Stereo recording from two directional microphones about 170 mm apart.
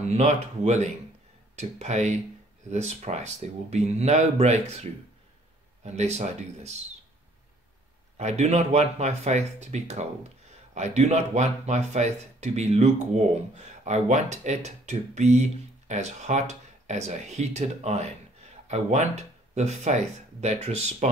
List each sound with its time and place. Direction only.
0.1 s speech: 40° right (ahead or behind)
5.9 s speech: 40° right (ahead or behind)
8.2 s speech: 40° right (ahead or behind)